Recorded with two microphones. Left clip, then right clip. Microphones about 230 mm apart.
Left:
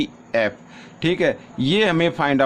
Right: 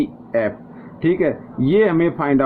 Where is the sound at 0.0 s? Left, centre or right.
Left.